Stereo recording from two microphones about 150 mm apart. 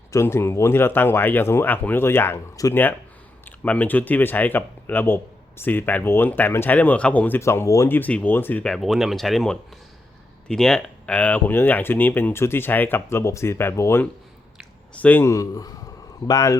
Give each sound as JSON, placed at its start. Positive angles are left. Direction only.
{"t": 0.1, "sound": "speech", "side_deg": 20}